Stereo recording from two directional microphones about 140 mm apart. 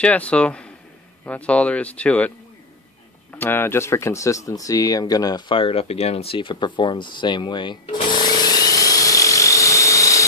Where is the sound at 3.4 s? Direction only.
15° left (ahead or behind).